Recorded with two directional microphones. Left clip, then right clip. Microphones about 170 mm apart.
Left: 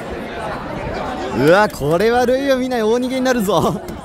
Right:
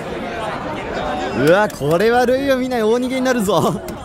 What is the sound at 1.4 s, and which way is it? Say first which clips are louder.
Speech: left 2 dB; 15° left (ahead or behind).